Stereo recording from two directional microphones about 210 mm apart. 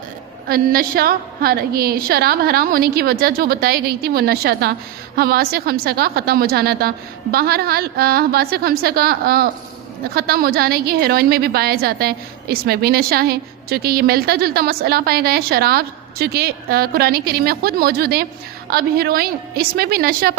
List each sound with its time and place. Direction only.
0.4 s a woman's voice: 45° right (ahead or behind)